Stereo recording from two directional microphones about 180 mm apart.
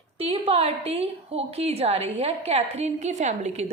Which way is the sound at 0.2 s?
35° right (ahead or behind).